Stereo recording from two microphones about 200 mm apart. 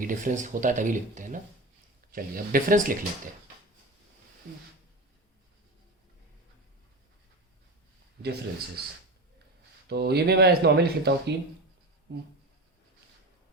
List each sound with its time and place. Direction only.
0.0 s speech: 40° right (ahead or behind)
8.2 s speech: 55° right (ahead or behind)
9.9 s speech: 55° right (ahead or behind)